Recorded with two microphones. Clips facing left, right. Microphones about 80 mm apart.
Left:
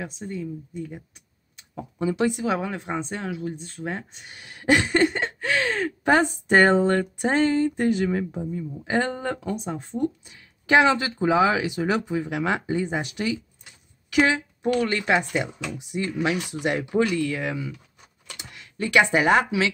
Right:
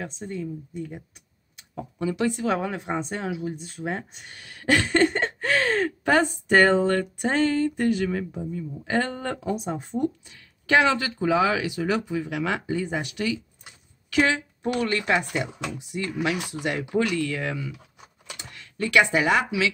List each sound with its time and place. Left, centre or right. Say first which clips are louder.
0.0 s speech: even; centre
2.0 s speech: left 2 dB; left
2.5 s speech: even; centre
4.3 s a sound: left 2 dB; centre
6.0 s speech: left 3 dB; centre
9.4 s speech: right 1 dB; centre
10.2 s speech: left 1 dB; centre
16.9 s a sound: left 1 dB; left
18.4 s speech: even; centre; by 19.7 s left